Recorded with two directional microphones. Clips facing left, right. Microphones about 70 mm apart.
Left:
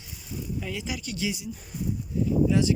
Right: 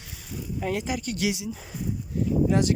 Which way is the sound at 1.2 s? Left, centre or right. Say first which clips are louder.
Right 3 dB; right.